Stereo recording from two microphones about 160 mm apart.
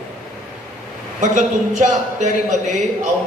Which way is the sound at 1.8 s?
50° right (ahead or behind).